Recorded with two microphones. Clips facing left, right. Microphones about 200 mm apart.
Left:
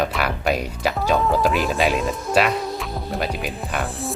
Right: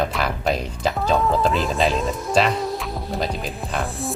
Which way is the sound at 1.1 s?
Centre (ahead or behind).